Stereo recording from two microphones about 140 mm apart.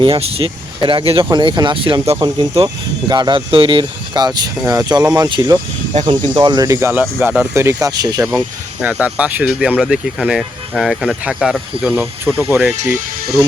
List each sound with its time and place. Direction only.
0.0 s speech: 40° right (ahead or behind); by 8.3 s 25° right (ahead or behind)
8.3 s speech: 10° right (ahead or behind)
12.2 s speech: 15° right (ahead or behind)